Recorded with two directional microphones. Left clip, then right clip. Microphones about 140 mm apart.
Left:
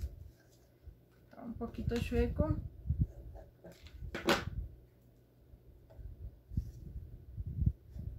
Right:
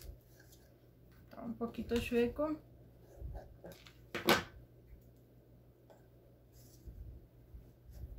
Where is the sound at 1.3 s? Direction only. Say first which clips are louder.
Right 2 dB; 15° right (ahead or behind).